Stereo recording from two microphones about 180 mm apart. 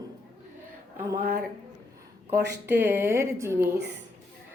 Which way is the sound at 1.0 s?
15° right (ahead or behind).